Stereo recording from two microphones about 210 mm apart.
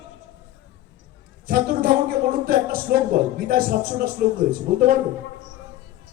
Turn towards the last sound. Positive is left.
turn(degrees=-45)  # may be behind; listen again after turning